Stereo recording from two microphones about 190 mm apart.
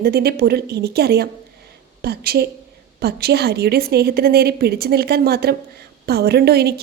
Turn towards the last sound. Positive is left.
turn(degrees=-55)  # may be behind; listen again after turning